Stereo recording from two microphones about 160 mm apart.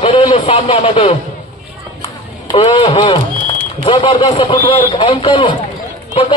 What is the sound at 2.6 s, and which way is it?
Speech, 35° left (ahead or behind).